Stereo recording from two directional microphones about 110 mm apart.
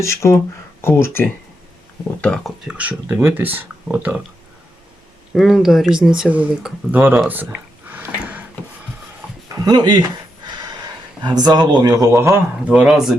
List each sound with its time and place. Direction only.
0.0 s speech: 25° left (ahead or behind)
2.2 s speech: 5° left (ahead or behind)
2.6 s speech: 15° right (ahead or behind)
5.3 s speech: centre (ahead or behind)
6.9 s speech: 20° right (ahead or behind)
7.3 s a sound: 15° right (ahead or behind)
9.6 s speech: 40° right (ahead or behind)
11.2 s speech: 40° right (ahead or behind)
12.6 s speech: 10° right (ahead or behind)